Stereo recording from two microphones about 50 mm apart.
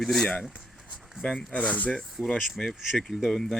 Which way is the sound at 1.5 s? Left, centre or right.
Left.